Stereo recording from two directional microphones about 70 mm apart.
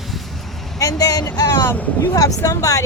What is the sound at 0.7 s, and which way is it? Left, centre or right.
Speech, left.